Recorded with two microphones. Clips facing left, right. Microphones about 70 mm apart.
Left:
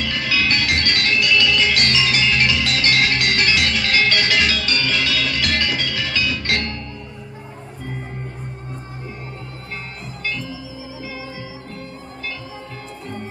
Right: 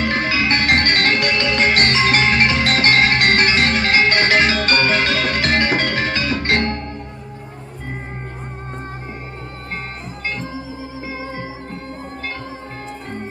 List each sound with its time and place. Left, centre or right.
0.0 s music: right
10.2 s music: right